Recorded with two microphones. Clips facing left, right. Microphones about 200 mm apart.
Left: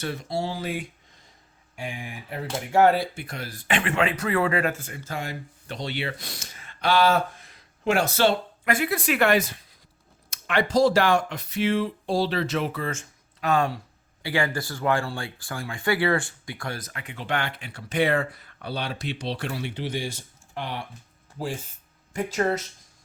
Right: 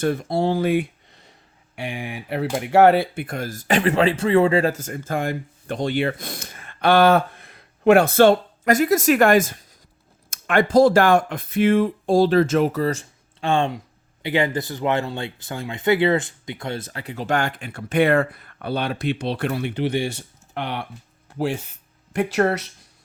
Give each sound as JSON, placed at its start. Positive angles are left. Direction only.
{"t": 0.0, "sound": "speech", "side_deg": -50}
{"t": 1.7, "sound": "speech", "side_deg": -70}
{"t": 4.7, "sound": "speech", "side_deg": -45}